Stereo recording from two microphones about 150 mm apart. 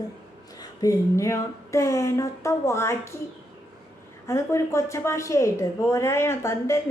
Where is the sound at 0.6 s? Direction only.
25° left (ahead or behind).